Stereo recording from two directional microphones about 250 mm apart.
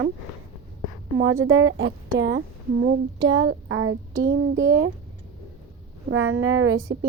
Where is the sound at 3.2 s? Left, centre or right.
Right.